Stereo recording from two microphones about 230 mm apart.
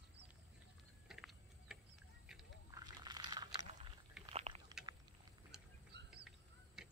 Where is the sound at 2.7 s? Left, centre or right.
Centre.